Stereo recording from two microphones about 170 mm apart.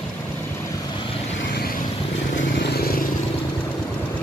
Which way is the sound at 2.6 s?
65° left (ahead or behind).